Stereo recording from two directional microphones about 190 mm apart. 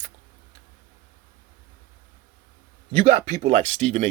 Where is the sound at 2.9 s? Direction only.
35° right (ahead or behind).